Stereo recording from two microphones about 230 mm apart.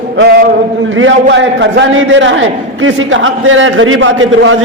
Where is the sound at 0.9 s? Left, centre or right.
Right.